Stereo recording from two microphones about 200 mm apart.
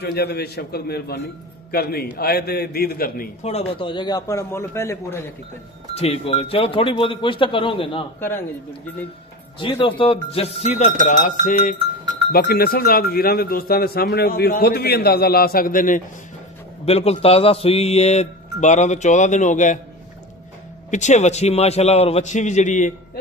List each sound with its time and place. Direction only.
0.0 s speech: 55° left (ahead or behind)
3.4 s a man's voice: 30° left (ahead or behind); by 5.3 s 10° left (ahead or behind)
5.9 s speech: 30° left (ahead or behind)
8.2 s a man's voice: 10° left (ahead or behind)
9.6 s speech: 25° left (ahead or behind)
12.3 s speech: 50° left (ahead or behind)
16.8 s speech: 30° left (ahead or behind)
20.9 s speech: 35° left (ahead or behind)